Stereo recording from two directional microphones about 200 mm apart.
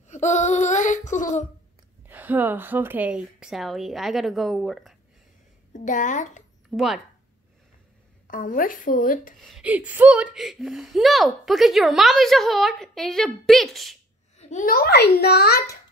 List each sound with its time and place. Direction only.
0.1 s a sound: 35° left (ahead or behind)
2.0 s speech: 10° right (ahead or behind)
5.7 s a woman's voice: 40° left (ahead or behind)
6.7 s speech: centre (ahead or behind)
8.3 s a child's voice: 40° left (ahead or behind)
9.4 s speech: centre (ahead or behind)
14.4 s a child's voice: 40° left (ahead or behind)